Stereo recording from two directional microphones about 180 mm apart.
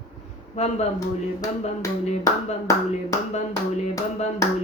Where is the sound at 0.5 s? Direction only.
40° left (ahead or behind).